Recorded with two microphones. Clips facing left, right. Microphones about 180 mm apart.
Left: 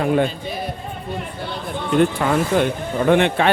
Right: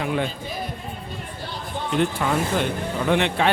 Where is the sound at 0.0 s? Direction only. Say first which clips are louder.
Left 7 dB; 45° left (ahead or behind).